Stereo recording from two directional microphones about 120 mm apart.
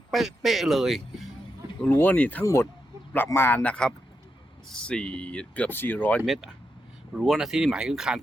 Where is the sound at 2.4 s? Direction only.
25° left (ahead or behind).